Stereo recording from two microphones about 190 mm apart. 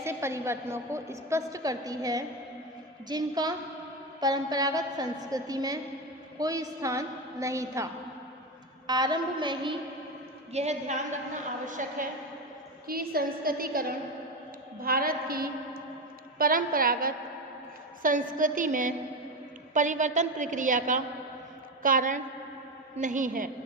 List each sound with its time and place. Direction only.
0.0 s a woman's voice: 15° right (ahead or behind)
8.9 s a woman's voice: 20° right (ahead or behind)
10.5 s a woman's voice: 35° right (ahead or behind)